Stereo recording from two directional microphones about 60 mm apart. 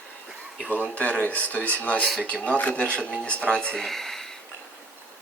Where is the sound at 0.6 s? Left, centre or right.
Left; by 4.2 s centre.